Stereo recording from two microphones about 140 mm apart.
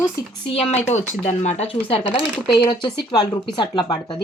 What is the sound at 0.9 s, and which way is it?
Speech, 55° left (ahead or behind).